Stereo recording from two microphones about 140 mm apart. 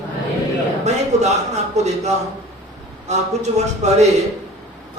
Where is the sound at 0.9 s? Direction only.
55° right (ahead or behind).